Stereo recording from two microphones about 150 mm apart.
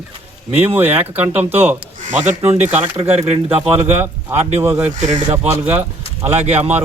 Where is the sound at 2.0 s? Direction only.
55° right (ahead or behind).